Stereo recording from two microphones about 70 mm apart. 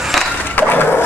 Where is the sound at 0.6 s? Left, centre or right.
Left.